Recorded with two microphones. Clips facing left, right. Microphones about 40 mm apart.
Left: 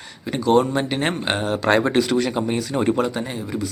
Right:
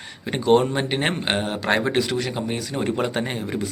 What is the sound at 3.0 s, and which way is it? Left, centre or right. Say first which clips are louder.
Speech: even; right.